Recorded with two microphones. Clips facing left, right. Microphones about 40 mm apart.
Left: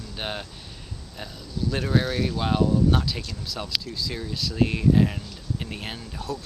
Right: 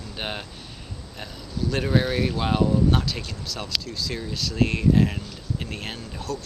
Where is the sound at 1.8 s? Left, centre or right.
Centre.